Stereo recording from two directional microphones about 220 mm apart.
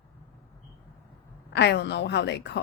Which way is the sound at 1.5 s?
50° left (ahead or behind).